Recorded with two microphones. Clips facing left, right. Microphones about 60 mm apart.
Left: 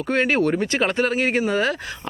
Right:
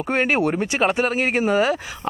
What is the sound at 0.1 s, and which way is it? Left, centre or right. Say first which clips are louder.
Speech: left 1 dB; centre.